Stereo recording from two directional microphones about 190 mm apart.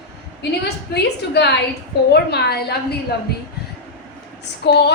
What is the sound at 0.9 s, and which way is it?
A woman's voice, 60° left (ahead or behind).